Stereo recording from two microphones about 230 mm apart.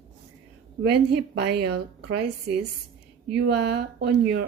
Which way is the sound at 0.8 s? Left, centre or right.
Right.